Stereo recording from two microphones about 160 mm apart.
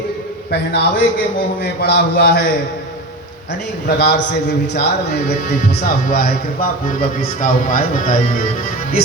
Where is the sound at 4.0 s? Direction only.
90° left.